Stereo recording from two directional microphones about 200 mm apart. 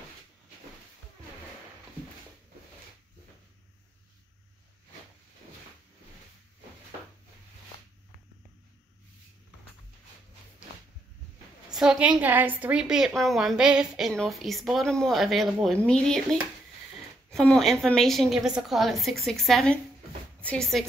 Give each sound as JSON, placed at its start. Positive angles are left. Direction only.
{"t": 11.7, "sound": "a woman's voice", "side_deg": -5}